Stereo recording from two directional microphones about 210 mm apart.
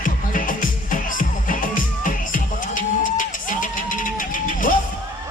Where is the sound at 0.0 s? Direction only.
40° left (ahead or behind).